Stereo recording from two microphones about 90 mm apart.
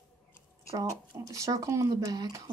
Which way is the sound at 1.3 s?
40° right (ahead or behind).